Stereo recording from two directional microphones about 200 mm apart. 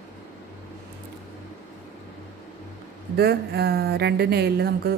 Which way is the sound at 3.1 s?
55° right (ahead or behind).